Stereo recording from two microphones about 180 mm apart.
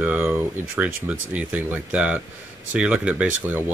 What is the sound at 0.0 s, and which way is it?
Speech, 10° right (ahead or behind).